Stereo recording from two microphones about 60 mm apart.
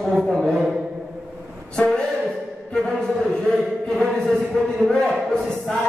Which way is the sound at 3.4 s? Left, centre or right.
Centre.